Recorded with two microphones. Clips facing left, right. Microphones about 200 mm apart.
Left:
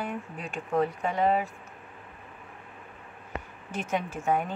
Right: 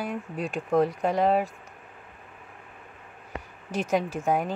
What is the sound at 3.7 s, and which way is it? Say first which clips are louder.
Speech: right 5 dB; 35° right (ahead or behind).